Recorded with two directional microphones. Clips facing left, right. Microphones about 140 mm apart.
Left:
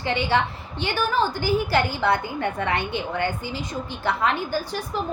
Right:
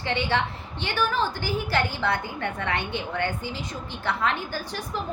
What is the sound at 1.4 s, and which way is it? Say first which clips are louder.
A woman's voice: left 5 dB; 10° left (ahead or behind).